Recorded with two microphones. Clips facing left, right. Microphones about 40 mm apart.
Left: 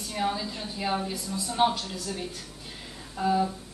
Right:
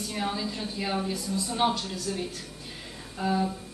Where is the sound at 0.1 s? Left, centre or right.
Centre.